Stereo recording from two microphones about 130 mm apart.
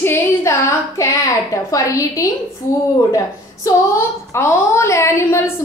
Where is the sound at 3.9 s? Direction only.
20° left (ahead or behind).